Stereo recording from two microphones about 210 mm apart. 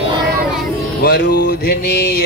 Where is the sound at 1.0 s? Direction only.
50° left (ahead or behind).